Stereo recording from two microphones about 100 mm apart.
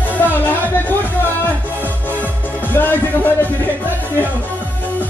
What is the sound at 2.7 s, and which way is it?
Music, 20° left (ahead or behind).